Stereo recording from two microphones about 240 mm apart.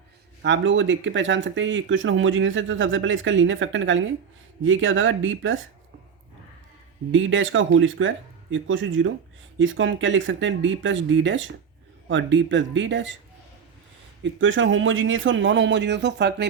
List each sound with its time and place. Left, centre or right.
0.4 s speech: right
7.1 s speech: right
14.3 s speech: right